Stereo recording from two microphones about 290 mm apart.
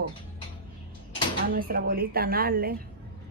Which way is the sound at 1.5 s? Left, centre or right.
Right.